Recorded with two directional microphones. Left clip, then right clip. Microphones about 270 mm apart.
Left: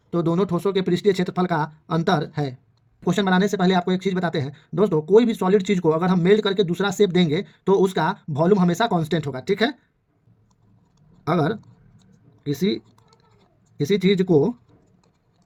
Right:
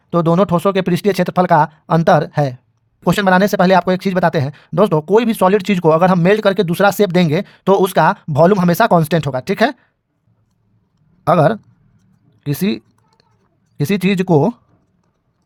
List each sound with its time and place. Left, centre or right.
0.1 s speech: right
11.2 s speech: right